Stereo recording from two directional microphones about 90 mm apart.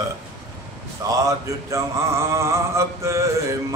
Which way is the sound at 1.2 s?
40° right (ahead or behind).